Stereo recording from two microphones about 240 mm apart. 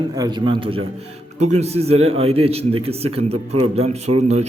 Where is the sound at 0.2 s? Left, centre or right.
Centre.